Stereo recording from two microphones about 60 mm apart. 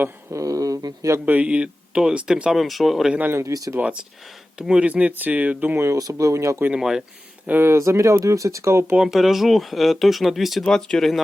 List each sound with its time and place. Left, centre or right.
0.3 s speech: right
1.2 s speech: right; by 3.1 s centre
3.4 s speech: right
4.5 s speech: centre
4.9 s speech: right
5.7 s speech: right
6.0 s speech: right
6.7 s speech: centre
7.6 s speech: right
9.0 s speech: centre
10.6 s speech: centre